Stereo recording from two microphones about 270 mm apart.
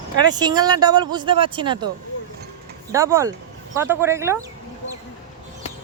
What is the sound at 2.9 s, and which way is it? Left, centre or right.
Speech, centre.